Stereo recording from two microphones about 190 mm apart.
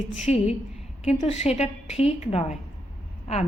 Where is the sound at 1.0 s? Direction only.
35° left (ahead or behind).